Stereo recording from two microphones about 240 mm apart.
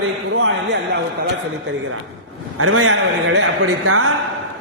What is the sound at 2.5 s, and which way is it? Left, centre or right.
A man's voice, right.